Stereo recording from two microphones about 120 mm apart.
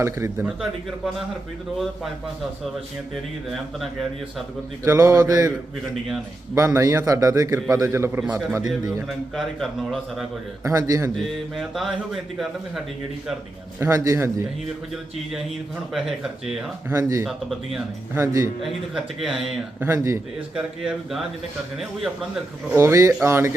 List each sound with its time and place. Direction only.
0.0 s a man's voice: 20° right (ahead or behind)
0.4 s a man's voice: 5° right (ahead or behind)
4.8 s a man's voice: 25° right (ahead or behind)
6.5 s a man's voice: 25° right (ahead or behind)
9.0 s a man's voice: centre (ahead or behind)
10.6 s a man's voice: 30° right (ahead or behind)
11.5 s a man's voice: centre (ahead or behind)
13.7 s a man's voice: 25° right (ahead or behind)
15.9 s a man's voice: 5° right (ahead or behind)
16.9 s a man's voice: 25° right (ahead or behind)
18.6 s a man's voice: centre (ahead or behind)
19.8 s a man's voice: 25° right (ahead or behind)
20.6 s a man's voice: 5° right (ahead or behind)
22.7 s a man's voice: 25° right (ahead or behind)